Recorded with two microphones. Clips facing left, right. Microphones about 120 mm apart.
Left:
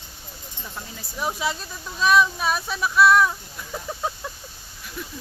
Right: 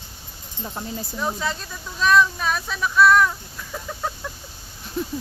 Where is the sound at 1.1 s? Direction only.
10° left (ahead or behind).